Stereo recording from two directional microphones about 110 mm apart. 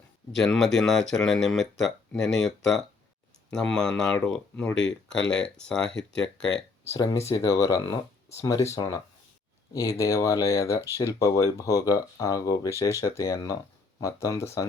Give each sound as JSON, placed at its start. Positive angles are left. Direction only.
{"t": 0.3, "sound": "speech", "side_deg": 5}
{"t": 6.8, "sound": "speech", "side_deg": 30}